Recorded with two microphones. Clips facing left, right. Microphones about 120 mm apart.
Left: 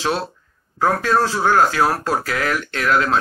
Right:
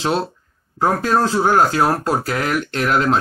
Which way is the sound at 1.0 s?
35° right (ahead or behind).